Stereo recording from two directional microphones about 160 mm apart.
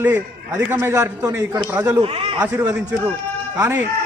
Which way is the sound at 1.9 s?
35° right (ahead or behind).